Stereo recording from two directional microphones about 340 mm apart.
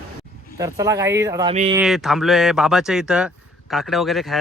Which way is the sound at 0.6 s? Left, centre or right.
Centre.